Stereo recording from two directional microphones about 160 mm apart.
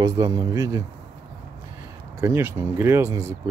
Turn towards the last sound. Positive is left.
turn(degrees=-15)  # may be behind; listen again after turning